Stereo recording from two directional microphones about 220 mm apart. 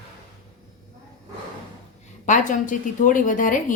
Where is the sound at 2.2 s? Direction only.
35° left (ahead or behind).